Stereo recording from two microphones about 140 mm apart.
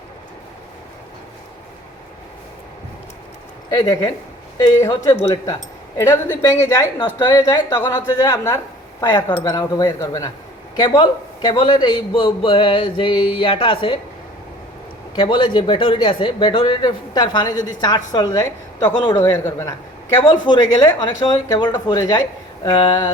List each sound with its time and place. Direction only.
3.7 s a man's voice: 30° left (ahead or behind)
15.1 s a man's voice: 35° left (ahead or behind); by 19.7 s 20° left (ahead or behind)
20.2 s a man's voice: 35° left (ahead or behind)